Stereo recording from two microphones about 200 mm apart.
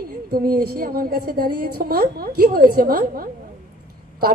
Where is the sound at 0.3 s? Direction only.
50° right (ahead or behind).